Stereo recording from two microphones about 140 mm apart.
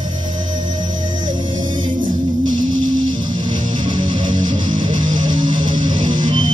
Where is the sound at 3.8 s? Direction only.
35° right (ahead or behind).